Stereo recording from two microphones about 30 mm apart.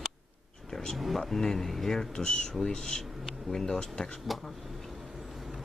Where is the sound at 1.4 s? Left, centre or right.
Centre.